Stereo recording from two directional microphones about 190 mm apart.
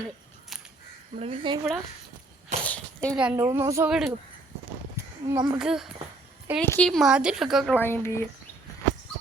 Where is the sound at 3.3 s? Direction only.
15° right (ahead or behind).